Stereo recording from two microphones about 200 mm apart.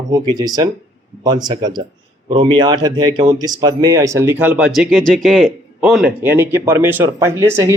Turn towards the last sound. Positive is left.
turn(degrees=-15)  # may be behind; listen again after turning